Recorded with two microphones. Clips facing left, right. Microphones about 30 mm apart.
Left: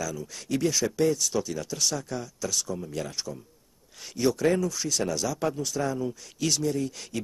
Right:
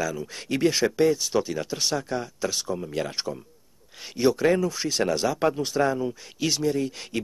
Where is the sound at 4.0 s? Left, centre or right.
Right.